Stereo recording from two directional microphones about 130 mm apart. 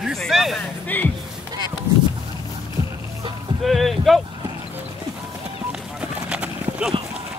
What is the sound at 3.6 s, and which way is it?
Speech, centre (ahead or behind).